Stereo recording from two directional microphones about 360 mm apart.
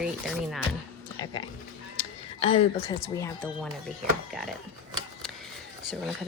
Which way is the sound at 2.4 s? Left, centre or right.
Centre.